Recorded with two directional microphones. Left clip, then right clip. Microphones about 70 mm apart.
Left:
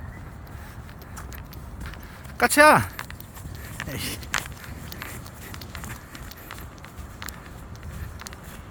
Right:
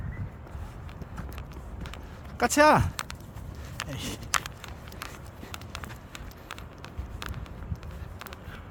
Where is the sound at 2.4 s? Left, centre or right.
Centre.